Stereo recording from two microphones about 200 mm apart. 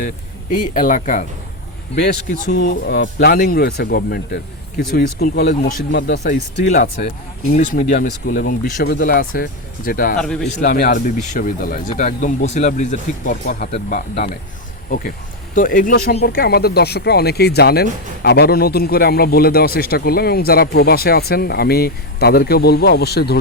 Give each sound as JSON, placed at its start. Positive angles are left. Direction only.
{"t": 0.7, "sound": "speech", "side_deg": 40}
{"t": 2.3, "sound": "speech", "side_deg": 45}
{"t": 6.7, "sound": "speech", "side_deg": 45}
{"t": 10.2, "sound": "a man's voice", "side_deg": 5}
{"t": 10.5, "sound": "speech", "side_deg": 40}